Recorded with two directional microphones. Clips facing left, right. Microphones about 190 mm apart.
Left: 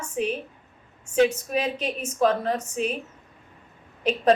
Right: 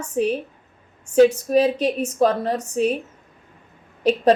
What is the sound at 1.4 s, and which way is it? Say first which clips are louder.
A woman's voice: right 9 dB; 35° right (ahead or behind).